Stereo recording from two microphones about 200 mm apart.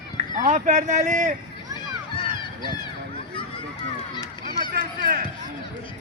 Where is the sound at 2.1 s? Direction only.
25° left (ahead or behind).